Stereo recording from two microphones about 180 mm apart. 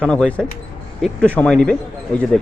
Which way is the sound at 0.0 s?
5° left (ahead or behind).